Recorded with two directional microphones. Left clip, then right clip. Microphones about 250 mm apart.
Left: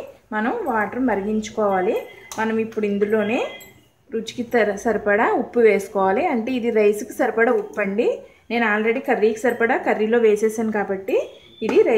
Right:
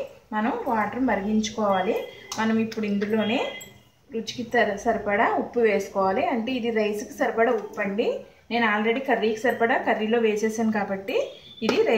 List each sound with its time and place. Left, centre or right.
0.3 s a woman's voice: left
4.5 s a woman's voice: left